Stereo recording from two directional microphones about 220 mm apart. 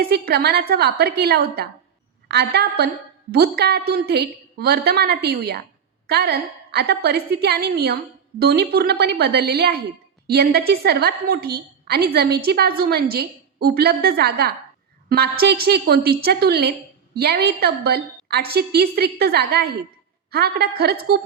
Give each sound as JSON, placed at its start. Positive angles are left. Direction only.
{"t": 0.0, "sound": "a woman's voice", "side_deg": -45}